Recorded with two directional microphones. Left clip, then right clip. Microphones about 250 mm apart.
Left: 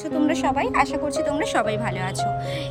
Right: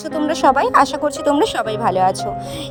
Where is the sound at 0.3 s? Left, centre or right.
Right.